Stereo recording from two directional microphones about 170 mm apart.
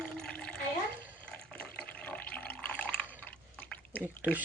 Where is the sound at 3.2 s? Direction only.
10° left (ahead or behind).